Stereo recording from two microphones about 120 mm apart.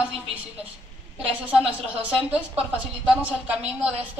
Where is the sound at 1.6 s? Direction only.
50° right (ahead or behind).